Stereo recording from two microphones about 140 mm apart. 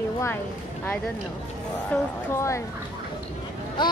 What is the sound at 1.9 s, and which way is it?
Speech, 10° left (ahead or behind).